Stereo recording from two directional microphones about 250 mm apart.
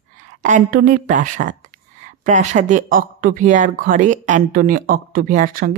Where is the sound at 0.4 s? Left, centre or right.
Right.